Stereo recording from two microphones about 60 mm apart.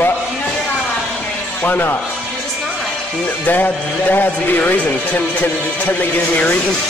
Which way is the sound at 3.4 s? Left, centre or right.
Left.